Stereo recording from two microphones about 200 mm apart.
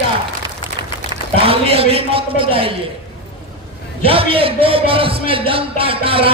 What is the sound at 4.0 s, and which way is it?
Speech, 25° right (ahead or behind).